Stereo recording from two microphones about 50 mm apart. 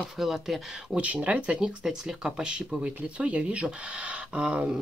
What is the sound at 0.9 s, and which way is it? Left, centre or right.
Speech, right.